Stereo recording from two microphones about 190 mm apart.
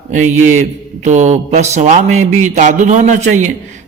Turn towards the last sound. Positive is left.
turn(degrees=-40)  # may be behind; listen again after turning